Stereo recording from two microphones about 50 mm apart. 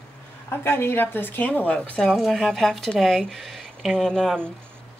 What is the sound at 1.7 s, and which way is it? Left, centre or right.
Speech, left.